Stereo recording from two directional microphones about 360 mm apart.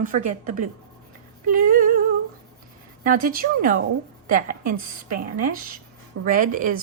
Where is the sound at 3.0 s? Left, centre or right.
Right.